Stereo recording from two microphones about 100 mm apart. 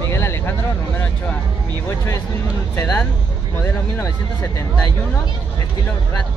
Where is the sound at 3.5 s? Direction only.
25° left (ahead or behind).